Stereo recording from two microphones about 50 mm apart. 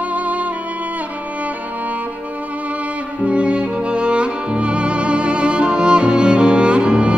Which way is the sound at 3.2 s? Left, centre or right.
Right.